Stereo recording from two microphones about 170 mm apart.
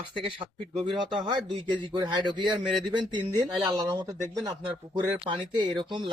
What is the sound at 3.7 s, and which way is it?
Speech, 25° right (ahead or behind).